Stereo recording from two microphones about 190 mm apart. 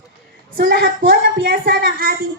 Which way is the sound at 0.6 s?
55° right (ahead or behind).